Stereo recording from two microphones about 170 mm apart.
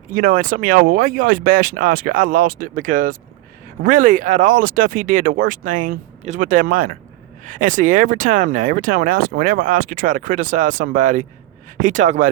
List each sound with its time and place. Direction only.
0.1 s speech: 55° right (ahead or behind)